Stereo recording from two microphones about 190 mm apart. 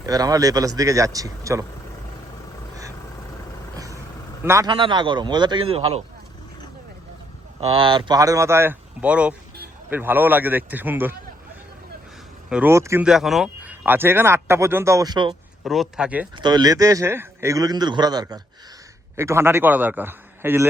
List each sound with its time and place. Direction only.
0.0 s a man's voice: 20° right (ahead or behind)
4.4 s a man's voice: 20° right (ahead or behind)
7.7 s speech: 25° right (ahead or behind); by 11.1 s 10° right (ahead or behind)
12.5 s speech: 10° right (ahead or behind)
13.1 s speech: centre (ahead or behind); by 15.4 s 20° right (ahead or behind)
15.6 s speech: centre (ahead or behind)
16.4 s a man's voice: 20° right (ahead or behind)